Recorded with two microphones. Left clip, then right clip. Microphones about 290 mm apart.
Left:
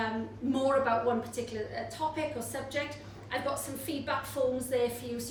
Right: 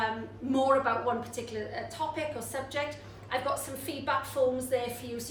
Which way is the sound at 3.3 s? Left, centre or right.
Centre.